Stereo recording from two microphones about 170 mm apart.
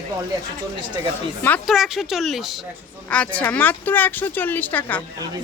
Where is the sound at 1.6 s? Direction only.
Centre (ahead or behind).